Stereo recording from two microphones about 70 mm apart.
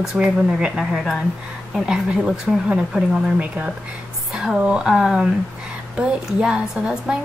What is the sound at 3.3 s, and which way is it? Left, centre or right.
Speech, centre.